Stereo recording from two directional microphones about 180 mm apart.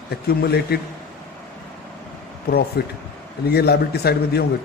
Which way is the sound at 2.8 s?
60° left (ahead or behind).